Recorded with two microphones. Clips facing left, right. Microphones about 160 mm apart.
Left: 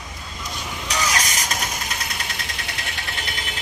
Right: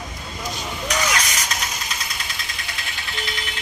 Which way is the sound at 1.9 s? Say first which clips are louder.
Left 2 dB; 60° left (ahead or behind).